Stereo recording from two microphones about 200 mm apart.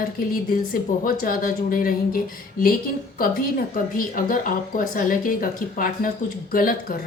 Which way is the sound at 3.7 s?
45° left (ahead or behind).